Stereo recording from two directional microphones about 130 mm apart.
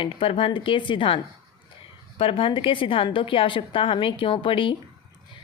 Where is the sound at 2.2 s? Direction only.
45° left (ahead or behind).